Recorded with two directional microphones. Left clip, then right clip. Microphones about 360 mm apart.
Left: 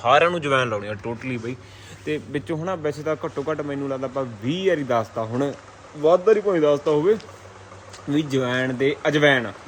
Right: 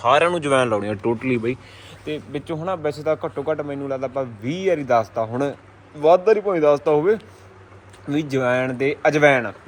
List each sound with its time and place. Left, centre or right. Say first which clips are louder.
0.0 s a man's voice: right 1 dB; centre
0.8 s speech: right 6 dB; centre
2.0 s a man's voice: left 1 dB; centre